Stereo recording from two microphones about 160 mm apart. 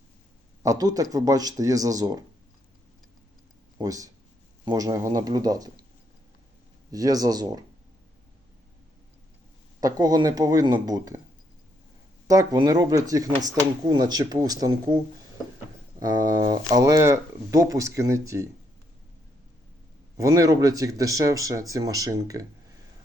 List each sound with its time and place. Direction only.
0.6 s a man's voice: 20° right (ahead or behind)
3.8 s speech: 20° right (ahead or behind)
6.9 s speech: 25° right (ahead or behind)
9.8 s speech: 25° right (ahead or behind)
12.3 s speech: 20° right (ahead or behind)
16.0 s speech: 25° right (ahead or behind)
20.1 s speech: 20° right (ahead or behind)